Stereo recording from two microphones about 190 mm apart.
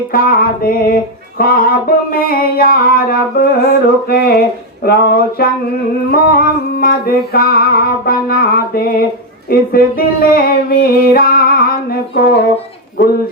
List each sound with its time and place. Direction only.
0.1 s music: 50° left (ahead or behind)